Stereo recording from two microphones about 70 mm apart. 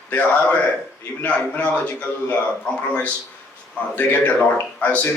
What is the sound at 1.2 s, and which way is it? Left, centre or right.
A man's voice, left.